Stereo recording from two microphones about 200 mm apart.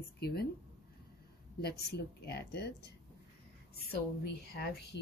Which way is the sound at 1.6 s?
55° left (ahead or behind).